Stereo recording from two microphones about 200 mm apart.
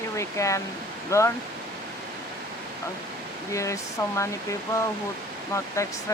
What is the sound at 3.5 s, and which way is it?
Speech, 15° left (ahead or behind).